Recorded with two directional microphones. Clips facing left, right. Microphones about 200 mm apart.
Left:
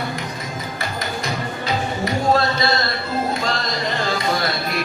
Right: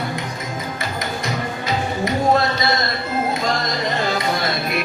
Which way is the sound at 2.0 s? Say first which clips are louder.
Right 1 dB; 20° right (ahead or behind).